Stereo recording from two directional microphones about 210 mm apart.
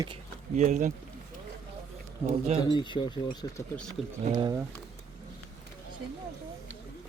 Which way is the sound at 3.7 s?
5° left (ahead or behind).